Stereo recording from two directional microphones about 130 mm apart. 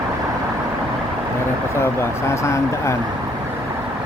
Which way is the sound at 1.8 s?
20° left (ahead or behind).